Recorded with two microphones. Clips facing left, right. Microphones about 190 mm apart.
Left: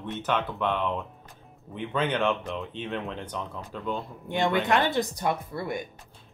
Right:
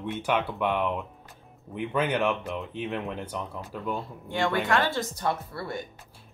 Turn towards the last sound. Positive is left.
turn(degrees=15)  # may be behind; listen again after turning